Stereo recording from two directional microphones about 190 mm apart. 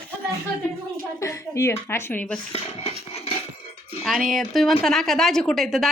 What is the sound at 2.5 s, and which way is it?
Cutlery, 35° left (ahead or behind).